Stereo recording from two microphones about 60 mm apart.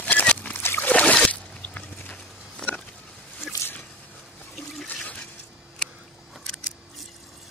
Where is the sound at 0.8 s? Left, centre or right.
Left.